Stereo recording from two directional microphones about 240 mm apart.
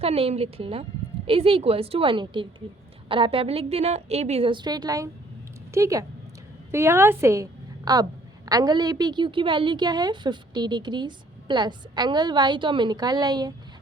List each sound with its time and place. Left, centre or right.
0.0 s a woman's voice: right